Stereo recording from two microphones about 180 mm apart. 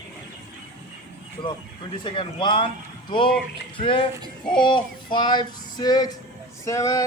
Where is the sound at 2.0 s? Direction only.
30° left (ahead or behind).